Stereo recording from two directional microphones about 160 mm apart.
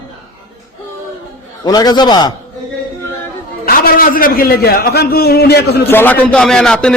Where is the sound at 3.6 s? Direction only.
65° left (ahead or behind); by 5.8 s 85° left.